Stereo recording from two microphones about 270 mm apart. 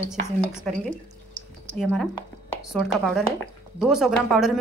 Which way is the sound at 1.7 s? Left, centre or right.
Centre.